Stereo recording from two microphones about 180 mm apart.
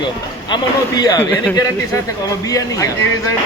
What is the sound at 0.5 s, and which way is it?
Speech, 20° left (ahead or behind).